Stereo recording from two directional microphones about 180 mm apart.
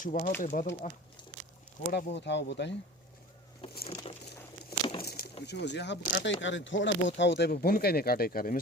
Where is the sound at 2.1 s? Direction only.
75° left (ahead or behind).